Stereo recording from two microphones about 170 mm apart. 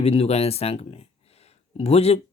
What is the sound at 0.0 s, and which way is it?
Speech, 35° left (ahead or behind).